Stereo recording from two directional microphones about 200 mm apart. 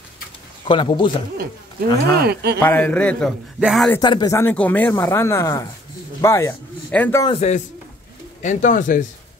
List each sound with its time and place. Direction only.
0.7 s a man's voice: 25° left (ahead or behind)
2.1 s speech: 55° right (ahead or behind)
2.6 s a man's voice: 10° left (ahead or behind)
3.9 s speech: 20° left (ahead or behind)
7.2 s speech: 35° left (ahead or behind)